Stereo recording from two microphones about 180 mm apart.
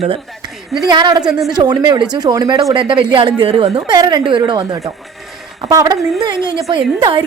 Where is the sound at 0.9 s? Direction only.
25° right (ahead or behind).